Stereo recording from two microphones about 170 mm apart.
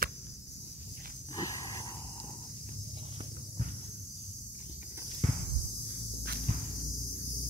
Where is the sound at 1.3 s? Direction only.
20° left (ahead or behind).